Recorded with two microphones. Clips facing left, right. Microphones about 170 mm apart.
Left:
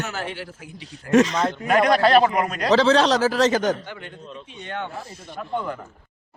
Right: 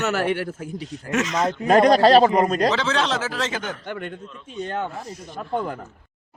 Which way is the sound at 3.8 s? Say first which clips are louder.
Right 6 dB; 55° right (ahead or behind).